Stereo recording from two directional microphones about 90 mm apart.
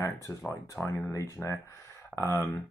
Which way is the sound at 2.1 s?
30° left (ahead or behind).